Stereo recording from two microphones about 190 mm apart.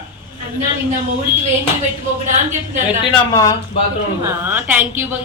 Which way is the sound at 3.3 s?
15° left (ahead or behind).